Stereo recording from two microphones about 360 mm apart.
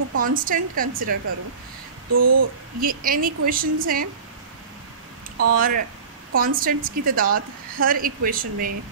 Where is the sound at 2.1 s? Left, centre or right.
Right.